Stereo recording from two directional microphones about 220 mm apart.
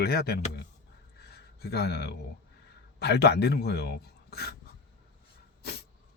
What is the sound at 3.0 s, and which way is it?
Speech, 50° left (ahead or behind).